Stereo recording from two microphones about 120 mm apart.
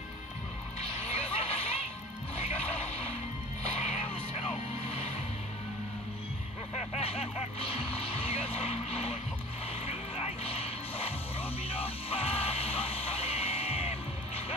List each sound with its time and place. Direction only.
0.7 s music: 60° left (ahead or behind)
7.0 s vehicle: 60° left (ahead or behind)
7.7 s music: 55° left (ahead or behind)